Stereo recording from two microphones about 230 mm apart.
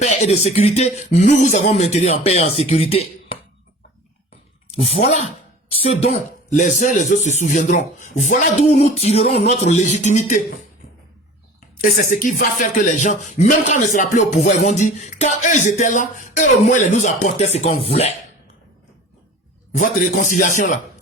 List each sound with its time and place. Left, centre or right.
0.0 s speech: left
4.7 s speech: left
11.8 s speech: left
19.7 s speech: left